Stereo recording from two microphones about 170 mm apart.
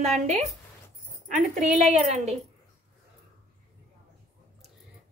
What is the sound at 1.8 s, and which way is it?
Speech, 40° right (ahead or behind).